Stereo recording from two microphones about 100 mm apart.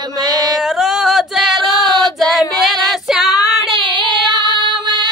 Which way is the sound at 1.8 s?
45° right (ahead or behind).